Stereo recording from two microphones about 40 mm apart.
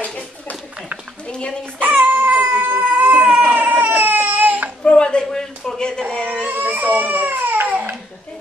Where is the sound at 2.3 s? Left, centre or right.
Right.